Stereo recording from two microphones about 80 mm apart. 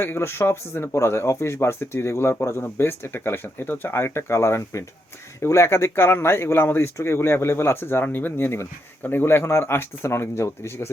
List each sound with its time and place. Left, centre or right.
0.0 s speech: left